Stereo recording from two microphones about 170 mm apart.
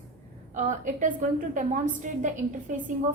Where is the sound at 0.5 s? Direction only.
45° right (ahead or behind).